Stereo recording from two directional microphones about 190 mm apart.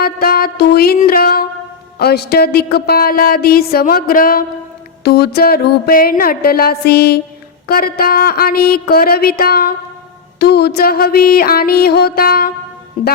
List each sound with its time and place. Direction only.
0.0 s a woman's voice: 50° left (ahead or behind)
5.0 s music: 55° left (ahead or behind)
7.7 s a woman's voice: 55° left (ahead or behind)